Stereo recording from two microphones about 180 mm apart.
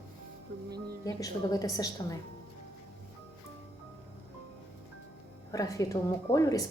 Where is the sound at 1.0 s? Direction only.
20° left (ahead or behind).